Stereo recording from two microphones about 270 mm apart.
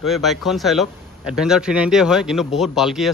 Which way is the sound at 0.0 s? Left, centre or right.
Centre.